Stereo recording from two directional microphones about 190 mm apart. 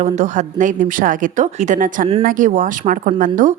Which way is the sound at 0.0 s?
40° right (ahead or behind).